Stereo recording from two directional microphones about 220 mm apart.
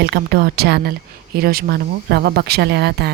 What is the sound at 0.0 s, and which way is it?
Speech, 45° right (ahead or behind).